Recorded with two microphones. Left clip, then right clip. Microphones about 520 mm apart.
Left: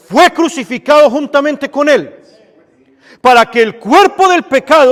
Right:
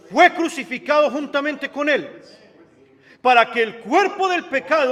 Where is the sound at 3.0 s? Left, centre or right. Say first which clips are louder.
Left 8 dB; left.